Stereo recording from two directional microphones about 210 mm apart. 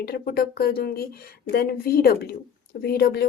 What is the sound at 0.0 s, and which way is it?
A woman's voice, 45° left (ahead or behind).